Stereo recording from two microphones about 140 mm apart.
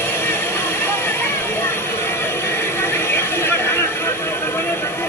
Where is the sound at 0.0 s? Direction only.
15° left (ahead or behind).